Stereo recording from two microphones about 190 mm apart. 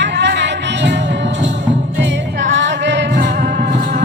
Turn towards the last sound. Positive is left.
turn(degrees=-50)  # may be behind; listen again after turning